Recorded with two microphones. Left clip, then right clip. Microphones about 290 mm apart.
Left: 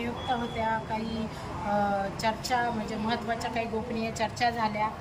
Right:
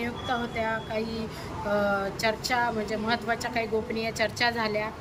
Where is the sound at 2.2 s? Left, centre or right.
Centre.